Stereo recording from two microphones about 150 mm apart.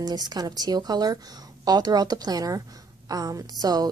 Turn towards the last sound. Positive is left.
turn(degrees=-25)  # may be behind; listen again after turning